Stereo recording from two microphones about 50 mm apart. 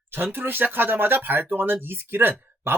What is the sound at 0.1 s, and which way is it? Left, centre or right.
Speech, right.